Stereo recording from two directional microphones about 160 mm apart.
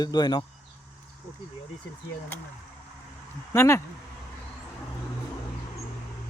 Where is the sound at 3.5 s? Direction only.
15° left (ahead or behind).